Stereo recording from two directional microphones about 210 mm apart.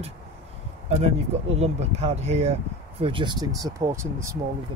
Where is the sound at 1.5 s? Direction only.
30° right (ahead or behind); by 4.3 s 15° right (ahead or behind).